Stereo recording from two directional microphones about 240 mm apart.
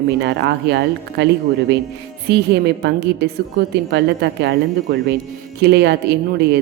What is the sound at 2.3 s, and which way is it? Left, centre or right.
Speech, right.